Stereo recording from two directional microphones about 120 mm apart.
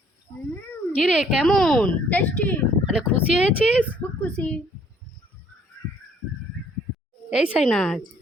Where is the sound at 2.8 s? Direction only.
10° right (ahead or behind).